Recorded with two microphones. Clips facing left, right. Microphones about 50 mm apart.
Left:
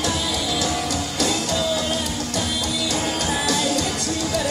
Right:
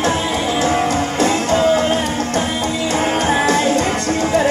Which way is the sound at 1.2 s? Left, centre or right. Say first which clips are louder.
Right 8 dB; right.